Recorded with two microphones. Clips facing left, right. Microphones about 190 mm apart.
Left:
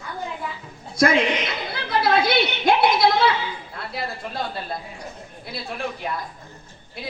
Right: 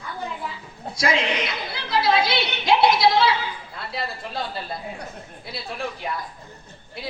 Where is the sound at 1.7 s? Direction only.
55° left (ahead or behind).